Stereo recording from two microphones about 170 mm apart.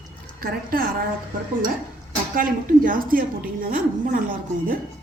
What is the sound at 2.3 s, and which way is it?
A woman's voice, 55° right (ahead or behind).